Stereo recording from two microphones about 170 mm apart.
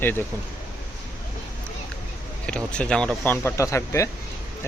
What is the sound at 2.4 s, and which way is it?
Speech, 5° left (ahead or behind).